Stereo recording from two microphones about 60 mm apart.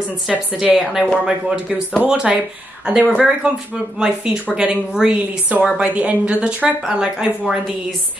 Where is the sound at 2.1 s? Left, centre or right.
Centre.